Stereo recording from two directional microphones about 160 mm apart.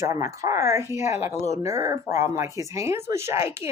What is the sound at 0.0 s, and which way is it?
Speech, 20° right (ahead or behind).